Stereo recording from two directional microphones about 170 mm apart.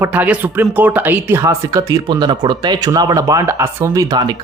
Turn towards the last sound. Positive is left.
turn(degrees=-25)  # may be behind; listen again after turning